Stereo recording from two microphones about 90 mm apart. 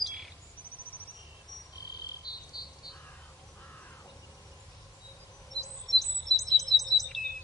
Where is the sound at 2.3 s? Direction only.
50° left (ahead or behind).